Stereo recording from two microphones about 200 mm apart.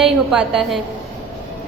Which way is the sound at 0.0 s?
Centre (ahead or behind).